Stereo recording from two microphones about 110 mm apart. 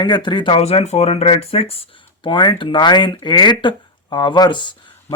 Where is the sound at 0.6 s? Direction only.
85° left; by 1.8 s 65° left (ahead or behind).